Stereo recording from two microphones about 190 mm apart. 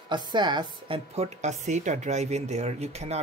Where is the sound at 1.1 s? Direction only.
35° right (ahead or behind).